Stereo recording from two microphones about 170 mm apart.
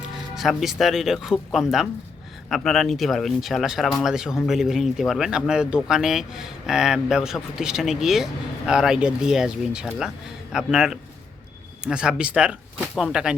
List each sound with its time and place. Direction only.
0.3 s speech: centre (ahead or behind)